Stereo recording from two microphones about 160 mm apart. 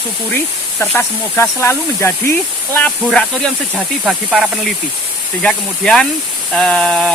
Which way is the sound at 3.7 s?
5° right (ahead or behind).